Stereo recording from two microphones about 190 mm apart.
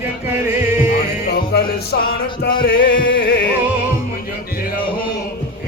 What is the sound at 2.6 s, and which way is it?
Music, 50° left (ahead or behind).